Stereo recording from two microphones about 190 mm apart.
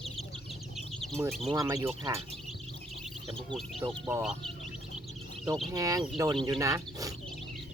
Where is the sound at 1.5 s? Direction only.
15° right (ahead or behind).